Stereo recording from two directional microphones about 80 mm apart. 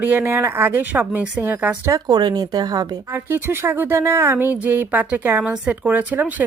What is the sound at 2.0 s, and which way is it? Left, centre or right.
Speech, right.